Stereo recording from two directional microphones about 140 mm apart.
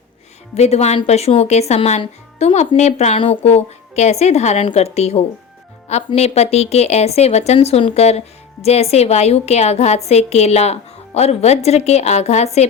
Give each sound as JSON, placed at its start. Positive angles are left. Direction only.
{"t": 0.5, "sound": "a woman's voice", "side_deg": 50}